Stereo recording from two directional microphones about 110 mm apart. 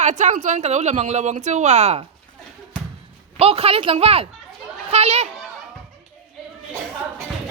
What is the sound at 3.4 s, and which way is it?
Speech, 60° right (ahead or behind).